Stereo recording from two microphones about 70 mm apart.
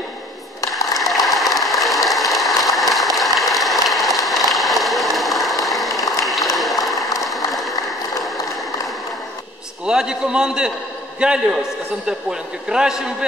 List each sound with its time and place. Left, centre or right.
0.9 s applause: centre
5.7 s a sound: centre
7.2 s applause: centre
9.8 s a man's voice: centre